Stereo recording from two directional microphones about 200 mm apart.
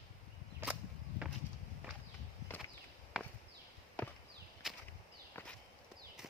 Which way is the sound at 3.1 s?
Centre (ahead or behind).